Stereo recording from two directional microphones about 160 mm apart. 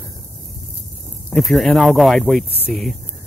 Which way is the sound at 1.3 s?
Centre (ahead or behind).